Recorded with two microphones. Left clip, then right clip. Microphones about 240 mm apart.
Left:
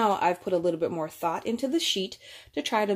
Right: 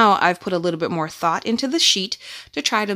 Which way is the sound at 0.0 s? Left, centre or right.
Right.